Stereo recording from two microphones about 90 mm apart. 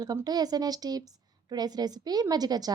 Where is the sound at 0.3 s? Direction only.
45° right (ahead or behind).